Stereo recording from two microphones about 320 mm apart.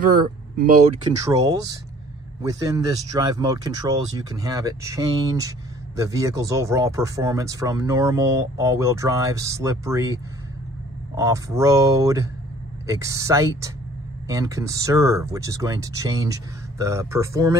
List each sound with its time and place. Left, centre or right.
0.0 s speech: right
1.2 s speech: centre